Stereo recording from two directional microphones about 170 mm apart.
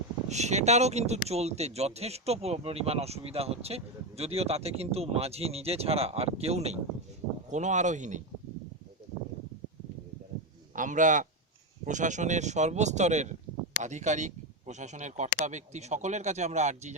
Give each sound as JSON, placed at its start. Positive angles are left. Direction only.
{"t": 0.3, "sound": "speech", "side_deg": -40}
{"t": 10.8, "sound": "speech", "side_deg": -50}